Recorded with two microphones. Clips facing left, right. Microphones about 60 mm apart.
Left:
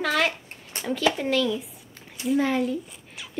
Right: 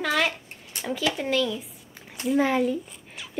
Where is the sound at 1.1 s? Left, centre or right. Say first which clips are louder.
Left 1 dB; centre.